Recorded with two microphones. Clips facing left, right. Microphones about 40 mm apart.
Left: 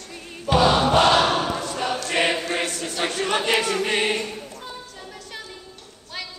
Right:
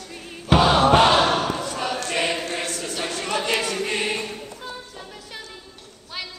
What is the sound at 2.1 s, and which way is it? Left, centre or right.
Choir, centre.